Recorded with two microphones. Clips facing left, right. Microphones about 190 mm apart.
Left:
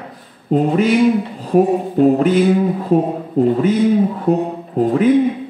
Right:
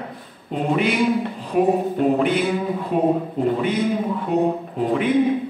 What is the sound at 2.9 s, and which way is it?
Speech, 40° left (ahead or behind).